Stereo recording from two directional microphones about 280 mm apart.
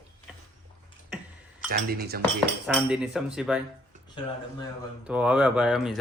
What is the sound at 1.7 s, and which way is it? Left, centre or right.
Speech, right.